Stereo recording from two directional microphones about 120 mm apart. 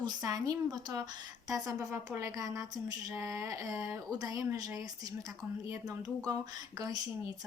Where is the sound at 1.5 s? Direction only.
25° right (ahead or behind).